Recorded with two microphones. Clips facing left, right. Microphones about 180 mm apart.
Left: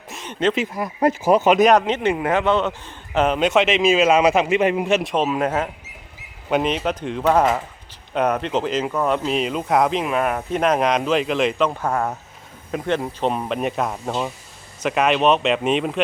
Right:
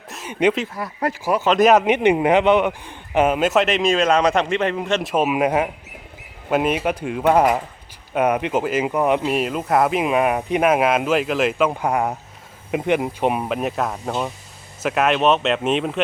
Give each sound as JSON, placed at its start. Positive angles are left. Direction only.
{"t": 0.1, "sound": "a sound", "side_deg": -5}
{"t": 0.5, "sound": "speech", "side_deg": 10}
{"t": 1.5, "sound": "a man's voice", "side_deg": 0}
{"t": 1.8, "sound": "a man's voice", "side_deg": -20}
{"t": 5.0, "sound": "speech", "side_deg": -10}
{"t": 10.0, "sound": "a man's voice", "side_deg": -15}